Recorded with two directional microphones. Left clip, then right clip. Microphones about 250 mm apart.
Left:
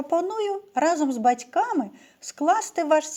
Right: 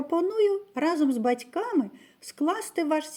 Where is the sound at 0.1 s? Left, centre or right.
Centre.